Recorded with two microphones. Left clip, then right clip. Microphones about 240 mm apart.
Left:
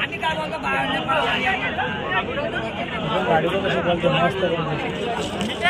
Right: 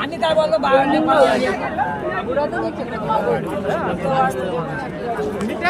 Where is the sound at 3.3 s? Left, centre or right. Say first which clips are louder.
Left 1 dB; left.